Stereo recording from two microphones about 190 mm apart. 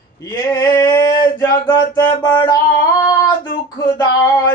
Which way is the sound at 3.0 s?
20° left (ahead or behind).